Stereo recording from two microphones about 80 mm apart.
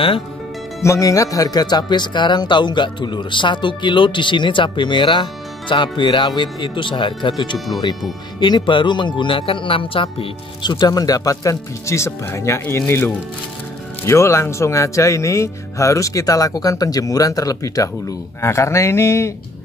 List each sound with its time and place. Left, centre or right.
0.8 s speech: left
7.5 s speech: centre
8.4 s speech: left
10.9 s speech: left
18.4 s speech: left